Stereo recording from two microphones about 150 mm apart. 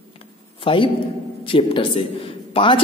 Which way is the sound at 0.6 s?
35° left (ahead or behind).